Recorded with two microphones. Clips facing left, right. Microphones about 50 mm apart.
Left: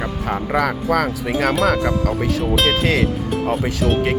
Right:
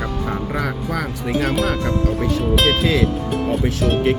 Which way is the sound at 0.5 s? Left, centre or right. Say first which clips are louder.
Left 5 dB; left.